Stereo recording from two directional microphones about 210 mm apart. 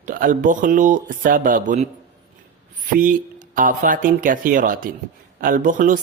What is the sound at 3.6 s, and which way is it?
Speech, 40° right (ahead or behind).